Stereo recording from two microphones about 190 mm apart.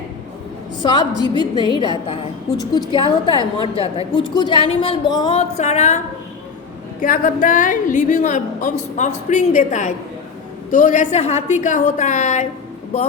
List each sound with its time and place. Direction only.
0.8 s a woman's voice: 25° left (ahead or behind)
7.0 s a woman's voice: 45° left (ahead or behind)